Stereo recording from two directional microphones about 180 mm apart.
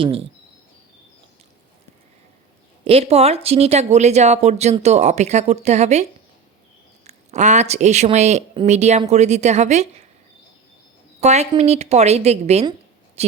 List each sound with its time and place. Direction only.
0.0 s speech: 30° right (ahead or behind)
2.8 s speech: 35° right (ahead or behind)
7.1 s speech: 40° right (ahead or behind)
11.2 s speech: 40° right (ahead or behind)